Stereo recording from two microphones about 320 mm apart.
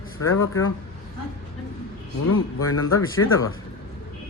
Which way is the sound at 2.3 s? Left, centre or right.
Left.